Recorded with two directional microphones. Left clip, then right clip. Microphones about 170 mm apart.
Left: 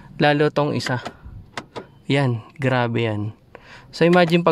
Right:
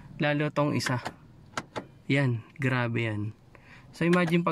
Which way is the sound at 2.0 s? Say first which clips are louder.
Left 7 dB; 30° left (ahead or behind).